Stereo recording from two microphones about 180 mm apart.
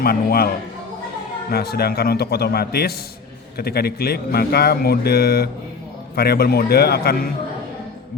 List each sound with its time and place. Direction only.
0.0 s speech: 55° left (ahead or behind)